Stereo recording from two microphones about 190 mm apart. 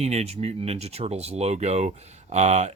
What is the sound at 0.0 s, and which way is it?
Speech, 35° right (ahead or behind).